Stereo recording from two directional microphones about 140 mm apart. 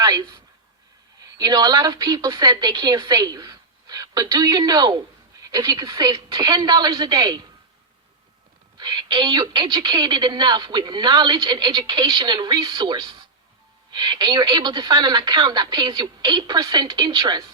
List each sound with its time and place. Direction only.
0.0 s a woman's voice: 25° right (ahead or behind)
1.4 s a woman's voice: 30° right (ahead or behind)
8.8 s a woman's voice: 30° right (ahead or behind)